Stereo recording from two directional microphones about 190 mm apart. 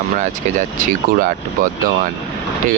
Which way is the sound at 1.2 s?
45° right (ahead or behind).